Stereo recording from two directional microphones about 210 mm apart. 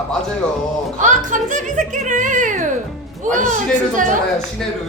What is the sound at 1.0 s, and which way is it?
Speech, 35° right (ahead or behind).